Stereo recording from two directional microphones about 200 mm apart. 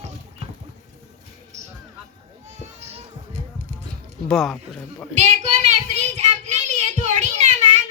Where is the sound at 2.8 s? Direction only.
30° right (ahead or behind).